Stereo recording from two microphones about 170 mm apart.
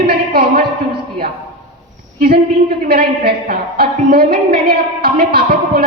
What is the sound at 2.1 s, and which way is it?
A woman's voice, 55° right (ahead or behind).